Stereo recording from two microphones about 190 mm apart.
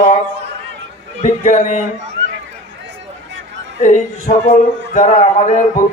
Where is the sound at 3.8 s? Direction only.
40° left (ahead or behind).